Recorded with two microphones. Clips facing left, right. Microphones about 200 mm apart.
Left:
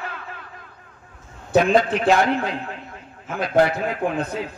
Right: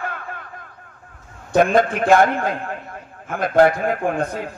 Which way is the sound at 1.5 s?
50° right (ahead or behind).